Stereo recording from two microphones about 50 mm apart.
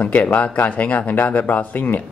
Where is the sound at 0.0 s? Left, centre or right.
Left.